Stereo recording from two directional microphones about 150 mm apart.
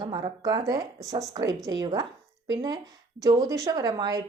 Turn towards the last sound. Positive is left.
turn(degrees=-25)  # may be behind; listen again after turning